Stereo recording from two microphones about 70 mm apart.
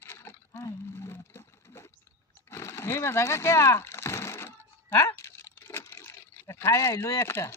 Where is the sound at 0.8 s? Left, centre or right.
Left.